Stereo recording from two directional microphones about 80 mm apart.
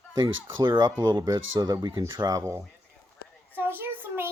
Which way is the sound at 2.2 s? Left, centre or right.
Right.